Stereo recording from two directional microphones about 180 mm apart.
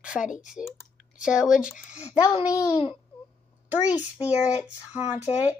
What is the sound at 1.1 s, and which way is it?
Speech, 5° right (ahead or behind).